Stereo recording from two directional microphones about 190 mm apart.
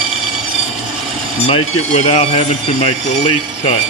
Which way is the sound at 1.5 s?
35° left (ahead or behind).